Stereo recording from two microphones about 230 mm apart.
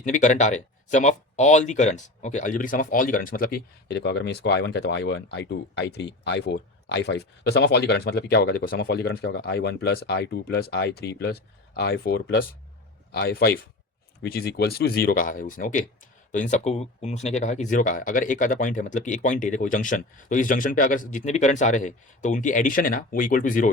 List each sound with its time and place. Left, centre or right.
0.0 s speech: left